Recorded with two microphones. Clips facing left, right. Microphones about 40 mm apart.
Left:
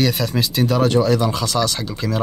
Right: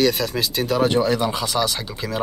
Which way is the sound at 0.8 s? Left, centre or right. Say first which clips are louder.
Left 2 dB; centre.